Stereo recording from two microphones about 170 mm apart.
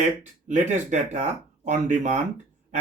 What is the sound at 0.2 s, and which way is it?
Speech, 45° right (ahead or behind).